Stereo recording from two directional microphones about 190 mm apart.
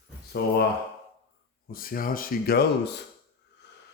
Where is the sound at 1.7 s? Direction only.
50° left (ahead or behind).